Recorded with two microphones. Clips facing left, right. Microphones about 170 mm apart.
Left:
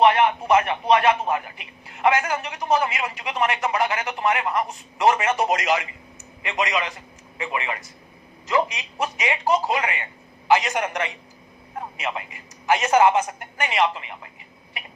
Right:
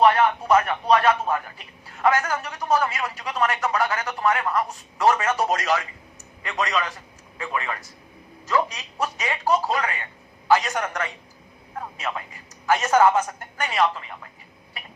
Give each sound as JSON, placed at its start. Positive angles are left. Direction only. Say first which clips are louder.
{"t": 0.0, "sound": "a man's voice", "louder": "left 1 dB", "side_deg": 20}